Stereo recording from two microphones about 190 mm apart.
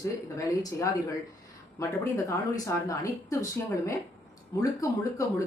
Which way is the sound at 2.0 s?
15° left (ahead or behind).